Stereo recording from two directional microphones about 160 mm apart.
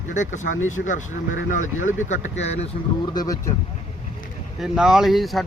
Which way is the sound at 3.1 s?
20° left (ahead or behind).